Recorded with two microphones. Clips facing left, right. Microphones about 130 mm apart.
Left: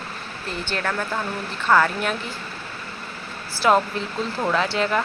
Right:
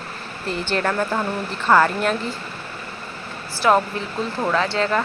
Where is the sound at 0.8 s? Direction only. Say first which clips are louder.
Right 3 dB; 15° right (ahead or behind).